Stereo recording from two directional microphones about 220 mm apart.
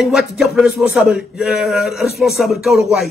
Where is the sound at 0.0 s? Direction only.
Centre (ahead or behind).